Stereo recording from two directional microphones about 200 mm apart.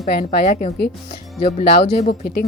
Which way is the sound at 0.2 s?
45° left (ahead or behind).